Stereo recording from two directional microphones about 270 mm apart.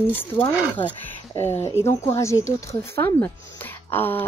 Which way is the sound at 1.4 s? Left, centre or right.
Centre.